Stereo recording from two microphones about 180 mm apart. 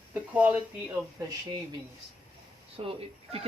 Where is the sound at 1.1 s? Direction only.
20° right (ahead or behind).